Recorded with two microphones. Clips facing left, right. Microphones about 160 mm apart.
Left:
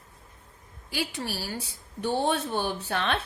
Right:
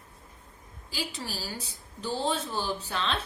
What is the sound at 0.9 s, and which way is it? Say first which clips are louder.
A woman's voice: left 4 dB; 65° left (ahead or behind).